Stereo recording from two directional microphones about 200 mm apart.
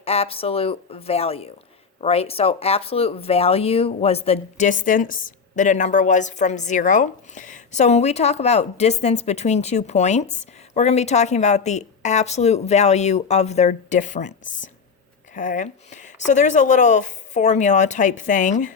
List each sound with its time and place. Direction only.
0.0 s speech: 30° left (ahead or behind)